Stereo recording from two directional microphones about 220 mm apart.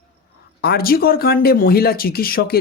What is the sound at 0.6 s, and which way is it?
Speech, 45° left (ahead or behind).